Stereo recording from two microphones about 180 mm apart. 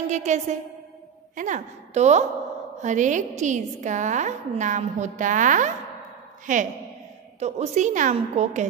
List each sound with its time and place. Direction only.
0.1 s a woman's voice: 40° right (ahead or behind)